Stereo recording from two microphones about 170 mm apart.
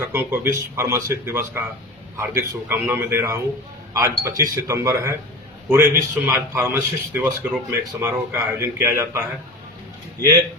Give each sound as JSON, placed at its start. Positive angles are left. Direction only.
{"t": 0.1, "sound": "a man's voice", "side_deg": -15}